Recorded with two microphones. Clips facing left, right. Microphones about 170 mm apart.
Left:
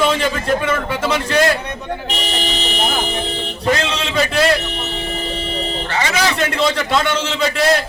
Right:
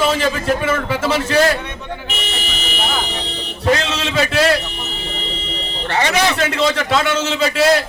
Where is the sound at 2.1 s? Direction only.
40° left (ahead or behind).